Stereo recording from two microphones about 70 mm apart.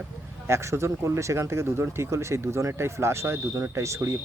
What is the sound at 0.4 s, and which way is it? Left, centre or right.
Speech, right.